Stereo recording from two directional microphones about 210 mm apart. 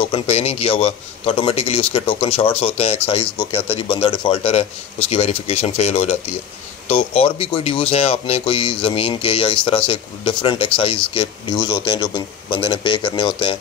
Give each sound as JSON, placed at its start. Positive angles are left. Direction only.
{"t": 0.0, "sound": "speech", "side_deg": 25}